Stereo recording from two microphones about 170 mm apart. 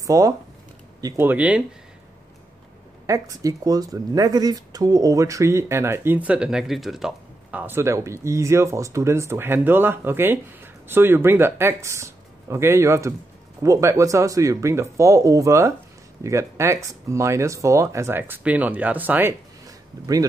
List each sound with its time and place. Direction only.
0.0 s speech: 20° right (ahead or behind)
3.1 s speech: 20° right (ahead or behind)